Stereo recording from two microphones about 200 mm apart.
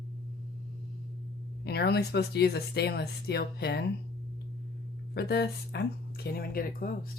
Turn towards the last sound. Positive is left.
turn(degrees=45)  # may be behind; listen again after turning